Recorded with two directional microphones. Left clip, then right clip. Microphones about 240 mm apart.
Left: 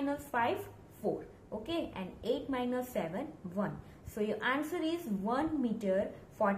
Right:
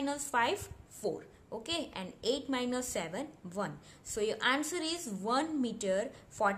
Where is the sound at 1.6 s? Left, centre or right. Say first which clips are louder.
Even; right.